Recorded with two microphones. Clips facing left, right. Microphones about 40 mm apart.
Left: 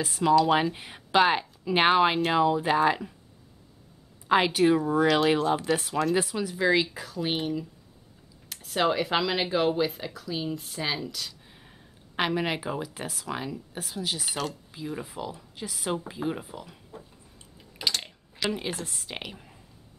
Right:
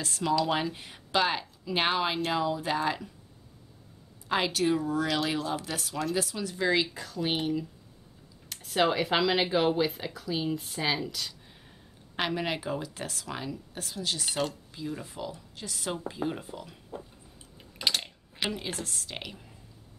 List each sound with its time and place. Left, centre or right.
0.0 s speech: centre
4.3 s speech: centre
6.5 s speech: centre
12.2 s speech: centre
17.8 s a sound: centre
18.5 s speech: centre